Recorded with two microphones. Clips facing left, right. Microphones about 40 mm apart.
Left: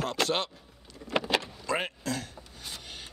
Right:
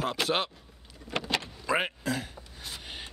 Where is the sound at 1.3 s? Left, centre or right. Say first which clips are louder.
Right 1 dB; centre.